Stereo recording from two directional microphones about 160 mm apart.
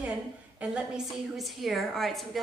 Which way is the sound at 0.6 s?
5° right (ahead or behind).